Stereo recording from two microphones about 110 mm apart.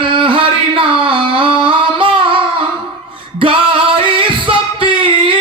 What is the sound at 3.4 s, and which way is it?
Singing, 50° right (ahead or behind).